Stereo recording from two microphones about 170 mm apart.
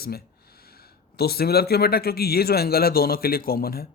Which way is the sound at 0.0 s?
65° left (ahead or behind).